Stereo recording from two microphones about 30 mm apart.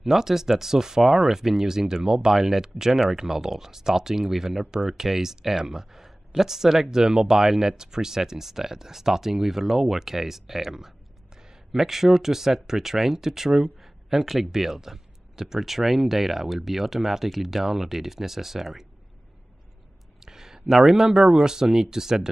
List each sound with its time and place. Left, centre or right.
0.0 s speech: centre
20.2 s a sound: centre
20.7 s speech: centre